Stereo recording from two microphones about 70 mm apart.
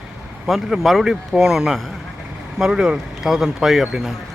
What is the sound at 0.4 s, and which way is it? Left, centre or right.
A man's voice, centre.